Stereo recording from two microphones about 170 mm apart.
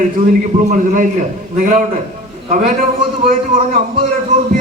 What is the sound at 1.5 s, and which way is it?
A man's voice, 50° right (ahead or behind).